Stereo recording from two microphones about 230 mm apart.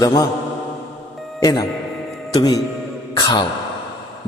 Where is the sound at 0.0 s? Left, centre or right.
Centre.